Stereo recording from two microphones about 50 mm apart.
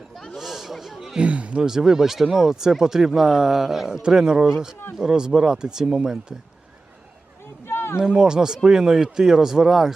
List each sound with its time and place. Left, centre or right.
0.3 s speech: centre
1.2 s speech: right
1.6 s speech: centre
7.7 s a sound: left
7.9 s speech: centre